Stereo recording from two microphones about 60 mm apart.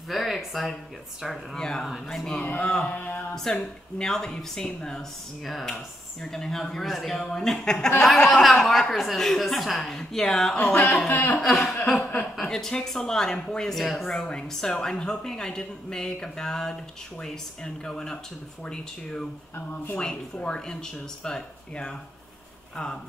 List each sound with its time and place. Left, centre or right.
0.1 s speech: centre
3.0 s speech: left
4.0 s speech: centre
11.1 s speech: left
11.4 s speech: centre
11.8 s chuckle: centre
12.4 s speech: centre
20.3 s speech: centre